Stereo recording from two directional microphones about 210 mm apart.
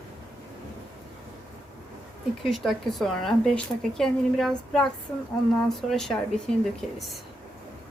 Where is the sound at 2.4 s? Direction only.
Centre (ahead or behind).